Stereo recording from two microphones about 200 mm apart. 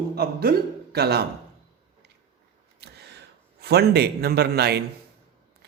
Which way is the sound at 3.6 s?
55° right (ahead or behind).